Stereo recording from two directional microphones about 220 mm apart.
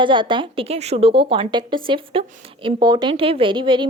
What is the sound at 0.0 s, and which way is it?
Speech, 20° right (ahead or behind).